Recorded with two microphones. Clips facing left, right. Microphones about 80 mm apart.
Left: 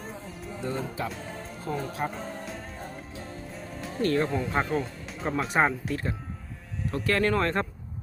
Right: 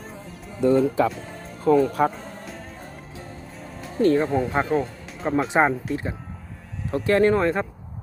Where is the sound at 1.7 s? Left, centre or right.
Right.